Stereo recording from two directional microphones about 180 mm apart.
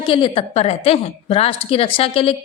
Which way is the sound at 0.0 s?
30° left (ahead or behind).